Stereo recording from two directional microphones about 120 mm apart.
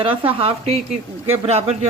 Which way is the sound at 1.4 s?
60° right (ahead or behind).